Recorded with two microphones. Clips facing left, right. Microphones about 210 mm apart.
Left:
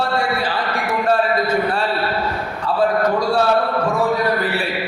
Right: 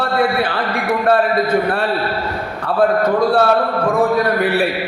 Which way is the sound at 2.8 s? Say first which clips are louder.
Right 4 dB; 55° right (ahead or behind).